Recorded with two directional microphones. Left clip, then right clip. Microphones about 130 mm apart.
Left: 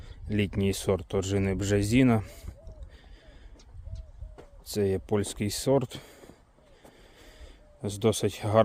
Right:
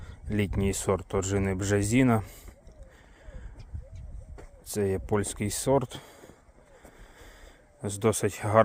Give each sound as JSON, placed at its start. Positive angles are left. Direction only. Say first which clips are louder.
{"t": 0.0, "sound": "speech", "louder": "even", "side_deg": 20}
{"t": 4.6, "sound": "speech", "louder": "left 1 dB", "side_deg": 25}
{"t": 7.2, "sound": "a sound", "louder": "right 1 dB", "side_deg": 20}